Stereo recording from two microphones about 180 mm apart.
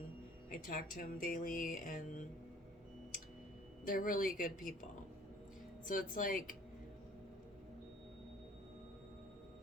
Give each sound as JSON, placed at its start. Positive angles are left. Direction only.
{"t": 0.6, "sound": "speech", "side_deg": 50}
{"t": 3.8, "sound": "speech", "side_deg": 50}
{"t": 5.9, "sound": "speech", "side_deg": 50}